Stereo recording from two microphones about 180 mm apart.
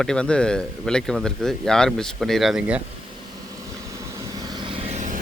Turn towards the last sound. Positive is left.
turn(degrees=-40)  # may be behind; listen again after turning